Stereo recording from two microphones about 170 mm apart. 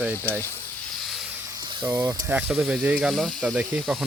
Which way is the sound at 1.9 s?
10° right (ahead or behind).